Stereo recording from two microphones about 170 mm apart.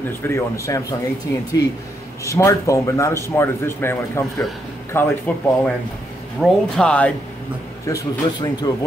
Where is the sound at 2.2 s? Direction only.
20° left (ahead or behind).